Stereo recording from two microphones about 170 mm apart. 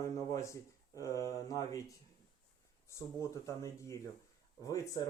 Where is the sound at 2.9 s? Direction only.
15° left (ahead or behind).